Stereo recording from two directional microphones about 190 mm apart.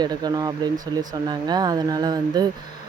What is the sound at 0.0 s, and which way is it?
Speech, 20° right (ahead or behind).